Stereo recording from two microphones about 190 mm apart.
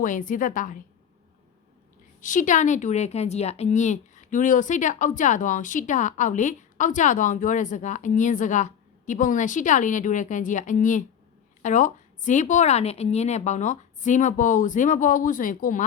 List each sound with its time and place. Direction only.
0.0 s a woman's voice: 45° left (ahead or behind)
2.2 s speech: 40° left (ahead or behind)